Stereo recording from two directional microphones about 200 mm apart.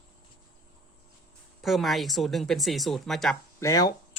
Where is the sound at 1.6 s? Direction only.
Centre (ahead or behind).